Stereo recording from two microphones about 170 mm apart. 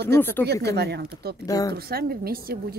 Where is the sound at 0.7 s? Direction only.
75° right (ahead or behind).